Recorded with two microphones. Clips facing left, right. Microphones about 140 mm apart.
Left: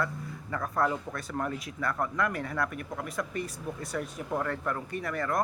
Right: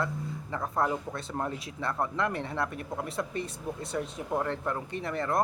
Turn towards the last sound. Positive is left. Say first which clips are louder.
# right 1 dB
turn(degrees=-25)  # may be behind; listen again after turning